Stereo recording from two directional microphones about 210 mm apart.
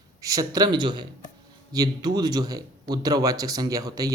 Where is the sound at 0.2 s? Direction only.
15° right (ahead or behind).